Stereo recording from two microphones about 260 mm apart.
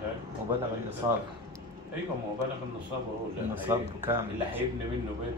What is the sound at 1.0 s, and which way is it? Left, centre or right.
Speech, centre.